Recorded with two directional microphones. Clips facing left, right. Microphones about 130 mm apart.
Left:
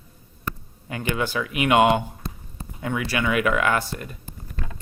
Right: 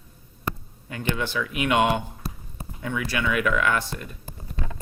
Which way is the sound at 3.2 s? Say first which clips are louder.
Left 2 dB; 60° left (ahead or behind).